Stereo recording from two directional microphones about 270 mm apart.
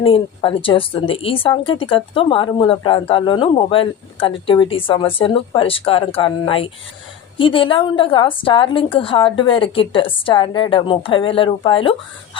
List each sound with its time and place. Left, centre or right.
0.0 s speech: centre